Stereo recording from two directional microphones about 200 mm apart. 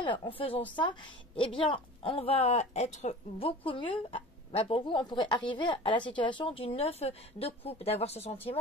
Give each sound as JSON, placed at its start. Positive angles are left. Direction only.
{"t": 0.0, "sound": "speech", "side_deg": 25}